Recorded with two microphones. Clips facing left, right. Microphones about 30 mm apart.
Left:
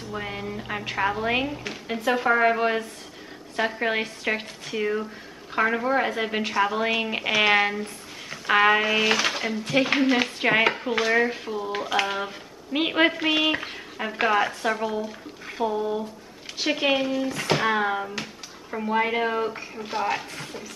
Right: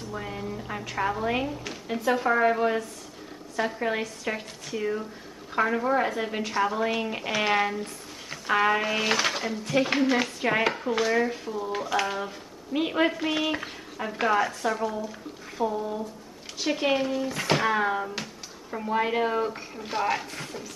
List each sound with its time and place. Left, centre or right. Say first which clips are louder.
0.1 s speech: left 3 dB; left
1.6 s speech: left 1 dB; left
8.8 s speech: left 3 dB; centre
9.4 s speech: left 2 dB; left
12.7 s speech: left 3 dB; left; by 17.3 s centre
17.3 s speech: left 1 dB; centre
17.7 s speech: left 1 dB; centre